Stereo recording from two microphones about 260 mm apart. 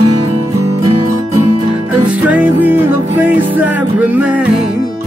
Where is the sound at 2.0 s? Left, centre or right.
Centre.